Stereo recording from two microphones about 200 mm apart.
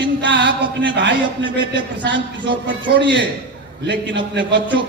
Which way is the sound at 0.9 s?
65° right (ahead or behind).